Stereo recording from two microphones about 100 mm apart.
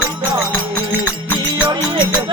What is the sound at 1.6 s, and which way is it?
Music, 50° right (ahead or behind).